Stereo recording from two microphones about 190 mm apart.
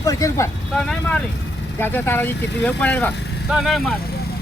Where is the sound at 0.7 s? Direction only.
5° left (ahead or behind).